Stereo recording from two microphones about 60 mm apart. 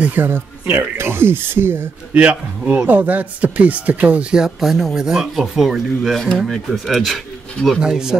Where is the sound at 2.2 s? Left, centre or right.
Right.